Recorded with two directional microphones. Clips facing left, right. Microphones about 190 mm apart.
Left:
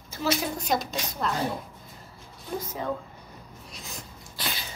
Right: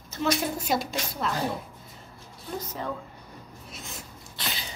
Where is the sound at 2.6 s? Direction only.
10° left (ahead or behind).